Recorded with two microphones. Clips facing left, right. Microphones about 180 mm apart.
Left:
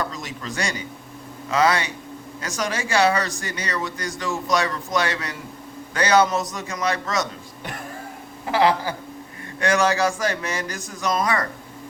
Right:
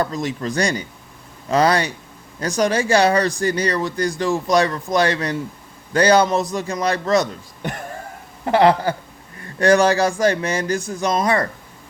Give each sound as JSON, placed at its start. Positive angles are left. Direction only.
{"t": 0.0, "sound": "speech", "side_deg": -35}
{"t": 8.4, "sound": "a sound", "side_deg": -50}
{"t": 9.6, "sound": "speech", "side_deg": -35}